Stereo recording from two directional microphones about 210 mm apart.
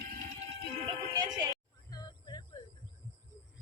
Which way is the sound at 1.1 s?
20° right (ahead or behind).